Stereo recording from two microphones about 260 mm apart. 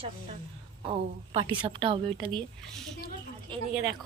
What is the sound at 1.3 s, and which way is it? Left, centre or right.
A woman's voice, centre.